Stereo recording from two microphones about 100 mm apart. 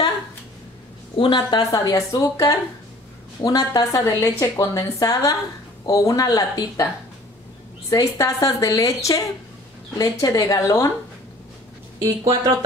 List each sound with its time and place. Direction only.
1.1 s a woman's voice: 55° left (ahead or behind)
1.7 s a woman's voice: 35° left (ahead or behind)
7.9 s a woman's voice: 35° left (ahead or behind)
12.0 s speech: 40° right (ahead or behind)